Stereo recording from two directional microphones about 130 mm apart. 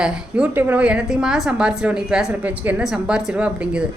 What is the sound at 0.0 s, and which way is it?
A woman's voice, 10° right (ahead or behind).